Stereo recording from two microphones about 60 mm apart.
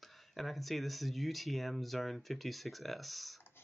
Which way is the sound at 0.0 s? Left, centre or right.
Centre.